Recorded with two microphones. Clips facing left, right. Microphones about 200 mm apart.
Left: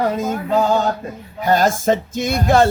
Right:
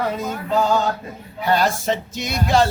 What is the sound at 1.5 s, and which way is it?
Music, 45° left (ahead or behind).